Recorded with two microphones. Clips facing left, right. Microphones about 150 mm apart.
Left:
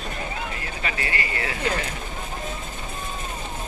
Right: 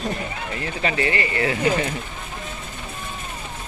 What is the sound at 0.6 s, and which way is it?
Speech, 30° right (ahead or behind).